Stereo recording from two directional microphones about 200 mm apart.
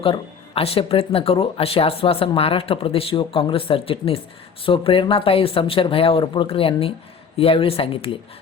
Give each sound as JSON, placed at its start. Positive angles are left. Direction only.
{"t": 0.0, "sound": "speech", "side_deg": 30}